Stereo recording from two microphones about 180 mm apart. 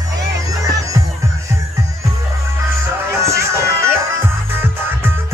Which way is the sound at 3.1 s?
15° right (ahead or behind).